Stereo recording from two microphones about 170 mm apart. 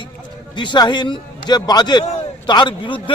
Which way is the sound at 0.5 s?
25° left (ahead or behind).